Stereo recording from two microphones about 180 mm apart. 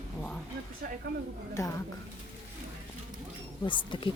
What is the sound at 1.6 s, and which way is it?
Speech, 15° left (ahead or behind).